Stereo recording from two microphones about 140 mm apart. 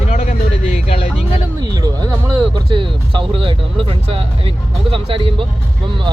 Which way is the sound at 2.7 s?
35° right (ahead or behind).